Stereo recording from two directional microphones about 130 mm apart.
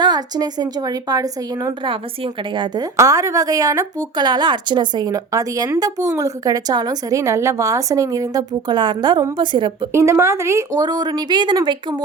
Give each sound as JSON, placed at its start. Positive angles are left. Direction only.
{"t": 0.0, "sound": "a woman's voice", "side_deg": -30}
{"t": 1.8, "sound": "a woman's voice", "side_deg": -40}
{"t": 3.0, "sound": "a woman's voice", "side_deg": -25}
{"t": 9.9, "sound": "speech", "side_deg": -20}